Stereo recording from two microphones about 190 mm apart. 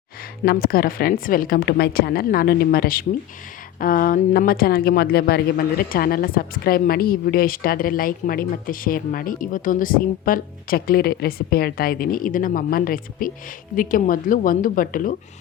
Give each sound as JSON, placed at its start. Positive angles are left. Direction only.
{"t": 0.4, "sound": "speech", "side_deg": 50}